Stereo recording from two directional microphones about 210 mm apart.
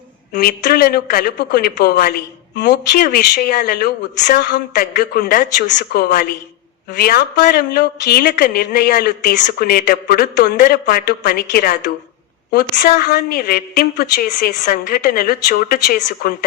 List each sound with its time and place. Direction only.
0.3 s a woman's voice: 45° left (ahead or behind)
12.9 s a woman's voice: 45° left (ahead or behind)